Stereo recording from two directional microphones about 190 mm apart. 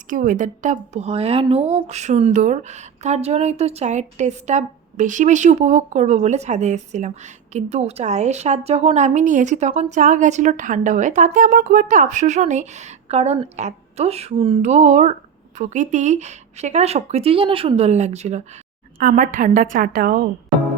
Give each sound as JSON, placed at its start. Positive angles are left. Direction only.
{"t": 0.1, "sound": "speech", "side_deg": -45}
{"t": 18.9, "sound": "a woman's voice", "side_deg": -45}